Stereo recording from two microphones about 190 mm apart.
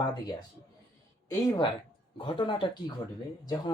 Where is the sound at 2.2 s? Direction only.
25° left (ahead or behind).